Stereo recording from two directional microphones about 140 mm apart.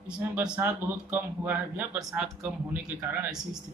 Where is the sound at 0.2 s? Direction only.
5° right (ahead or behind).